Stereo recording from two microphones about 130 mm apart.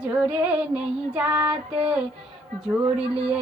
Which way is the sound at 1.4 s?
45° right (ahead or behind).